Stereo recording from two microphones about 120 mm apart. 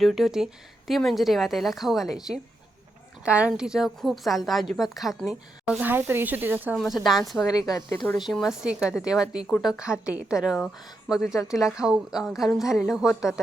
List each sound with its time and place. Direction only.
0.0 s a woman's voice: centre (ahead or behind)
3.2 s a woman's voice: 10° right (ahead or behind)
5.8 s speech: 15° right (ahead or behind)
6.7 s a woman's voice: centre (ahead or behind)
7.7 s speech: 25° left (ahead or behind)
8.1 s a woman's voice: centre (ahead or behind)